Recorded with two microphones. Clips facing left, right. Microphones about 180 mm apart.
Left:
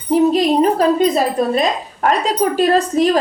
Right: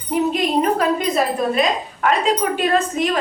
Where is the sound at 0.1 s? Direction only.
35° left (ahead or behind).